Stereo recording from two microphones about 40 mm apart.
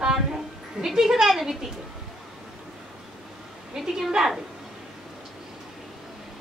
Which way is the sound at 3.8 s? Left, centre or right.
Centre.